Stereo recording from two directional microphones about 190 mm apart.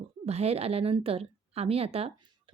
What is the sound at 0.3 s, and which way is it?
A woman's voice, 35° right (ahead or behind).